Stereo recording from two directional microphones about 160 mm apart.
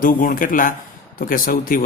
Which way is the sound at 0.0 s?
60° left (ahead or behind).